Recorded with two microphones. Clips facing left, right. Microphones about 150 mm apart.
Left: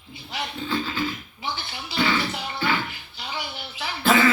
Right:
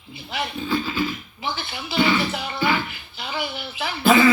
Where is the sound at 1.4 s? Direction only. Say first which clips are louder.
Right 3 dB; 60° right (ahead or behind).